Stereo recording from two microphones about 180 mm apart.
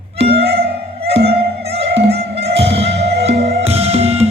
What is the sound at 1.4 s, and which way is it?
Music, 35° right (ahead or behind).